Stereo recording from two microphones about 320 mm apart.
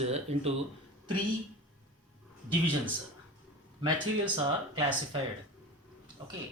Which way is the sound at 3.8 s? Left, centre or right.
Centre.